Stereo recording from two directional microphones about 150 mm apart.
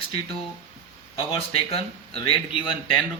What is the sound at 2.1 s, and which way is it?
Speech, 35° left (ahead or behind).